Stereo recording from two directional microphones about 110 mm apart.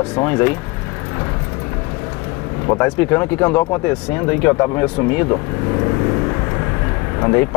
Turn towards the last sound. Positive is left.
turn(degrees=25)  # may be behind; listen again after turning